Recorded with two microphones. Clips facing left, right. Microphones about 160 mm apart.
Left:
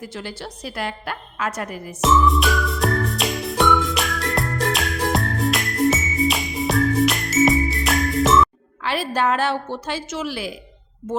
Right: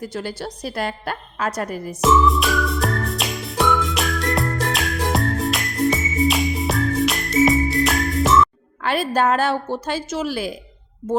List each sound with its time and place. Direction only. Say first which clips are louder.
0.0 s a woman's voice: right 4 dB; 40° right (ahead or behind)
2.0 s music: right 1 dB; centre (ahead or behind)
8.8 s a woman's voice: right 3 dB; 45° right (ahead or behind)